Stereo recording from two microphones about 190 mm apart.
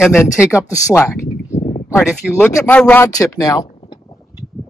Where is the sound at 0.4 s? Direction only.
5° right (ahead or behind).